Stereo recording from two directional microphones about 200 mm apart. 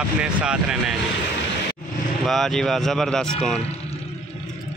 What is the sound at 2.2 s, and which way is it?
Speech, centre (ahead or behind).